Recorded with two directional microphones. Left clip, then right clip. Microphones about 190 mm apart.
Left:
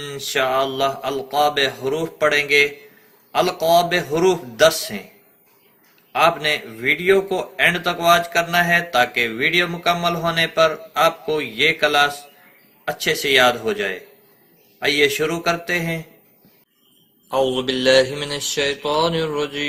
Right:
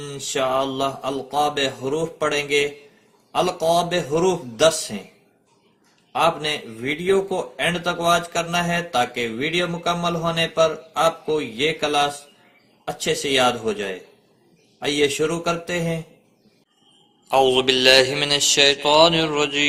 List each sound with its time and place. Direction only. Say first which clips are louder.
0.0 s a man's voice: left 3 dB; 5° right (ahead or behind)
6.1 s a man's voice: left 3 dB; 5° right (ahead or behind)
17.2 s a man's voice: right 3 dB; 15° right (ahead or behind)
17.7 s mantra: right 1 dB; 15° right (ahead or behind)